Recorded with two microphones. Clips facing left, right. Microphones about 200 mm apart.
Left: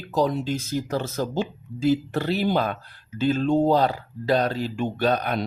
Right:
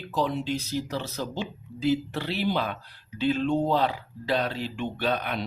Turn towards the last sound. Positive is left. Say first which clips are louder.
# left 5 dB
turn(degrees=40)  # may be behind; listen again after turning